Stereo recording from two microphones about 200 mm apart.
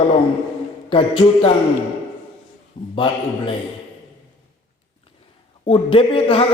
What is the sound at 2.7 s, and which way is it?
Speech, 25° left (ahead or behind).